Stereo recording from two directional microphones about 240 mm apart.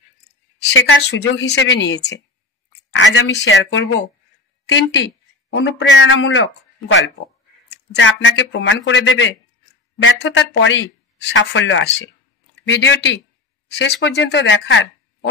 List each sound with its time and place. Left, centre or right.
0.7 s speech: left
3.0 s a sound: left
3.4 s speech: left